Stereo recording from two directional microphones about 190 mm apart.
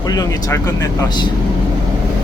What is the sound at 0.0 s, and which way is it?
Speech, 20° left (ahead or behind).